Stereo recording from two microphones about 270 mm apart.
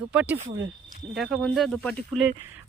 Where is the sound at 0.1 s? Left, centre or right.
Centre.